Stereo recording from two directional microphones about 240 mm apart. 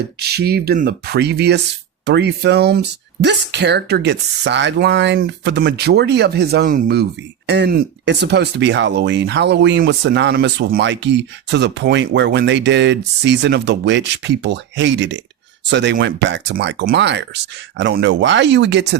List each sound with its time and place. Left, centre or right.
0.2 s speech: right